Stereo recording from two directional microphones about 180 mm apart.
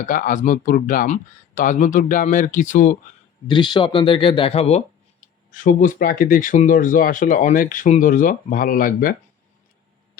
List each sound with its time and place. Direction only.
0.0 s speech: 45° left (ahead or behind)
3.4 s speech: 25° left (ahead or behind)
5.5 s speech: 50° left (ahead or behind)